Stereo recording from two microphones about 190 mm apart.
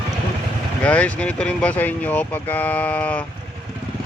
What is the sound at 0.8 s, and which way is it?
Speech, 5° left (ahead or behind).